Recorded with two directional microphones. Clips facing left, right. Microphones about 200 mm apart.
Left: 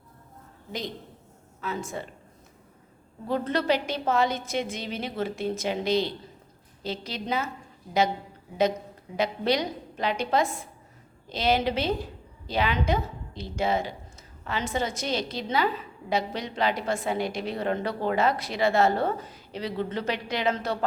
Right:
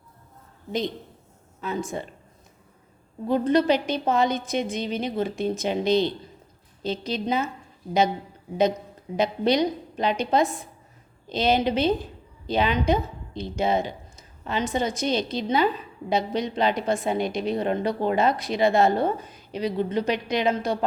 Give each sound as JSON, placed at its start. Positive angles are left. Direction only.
{"t": 1.6, "sound": "speech", "side_deg": -20}
{"t": 3.2, "sound": "a woman's voice", "side_deg": -15}
{"t": 9.1, "sound": "a woman's voice", "side_deg": -20}